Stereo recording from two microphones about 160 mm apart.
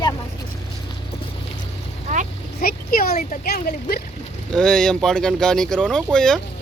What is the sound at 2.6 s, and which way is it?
Speech, 70° left (ahead or behind).